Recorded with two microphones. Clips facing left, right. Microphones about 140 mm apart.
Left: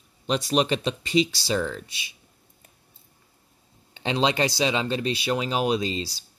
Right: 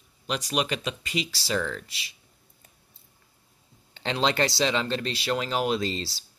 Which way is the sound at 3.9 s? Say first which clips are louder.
Left 2 dB; 15° left (ahead or behind).